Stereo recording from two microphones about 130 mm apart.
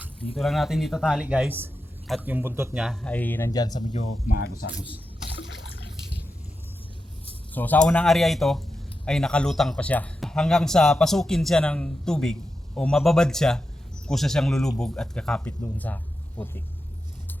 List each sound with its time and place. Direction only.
0.3 s a man's voice: centre (ahead or behind); by 2.7 s 20° right (ahead or behind)
2.7 s speech: centre (ahead or behind)
3.5 s speech: 30° left (ahead or behind)
3.9 s speech: 75° left (ahead or behind)
7.5 s a man's voice: 15° left (ahead or behind)